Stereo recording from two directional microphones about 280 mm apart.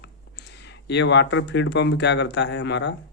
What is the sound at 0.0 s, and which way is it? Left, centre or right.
Speech, left.